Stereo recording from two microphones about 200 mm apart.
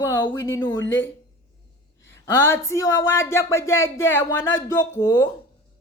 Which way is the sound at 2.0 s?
15° left (ahead or behind).